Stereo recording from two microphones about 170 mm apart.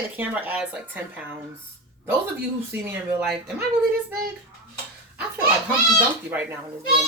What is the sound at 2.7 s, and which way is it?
Speech, 10° right (ahead or behind).